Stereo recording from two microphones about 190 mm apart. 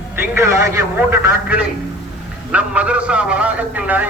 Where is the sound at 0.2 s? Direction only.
15° right (ahead or behind).